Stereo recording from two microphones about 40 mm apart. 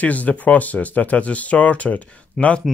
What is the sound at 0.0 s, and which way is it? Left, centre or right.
Speech, left.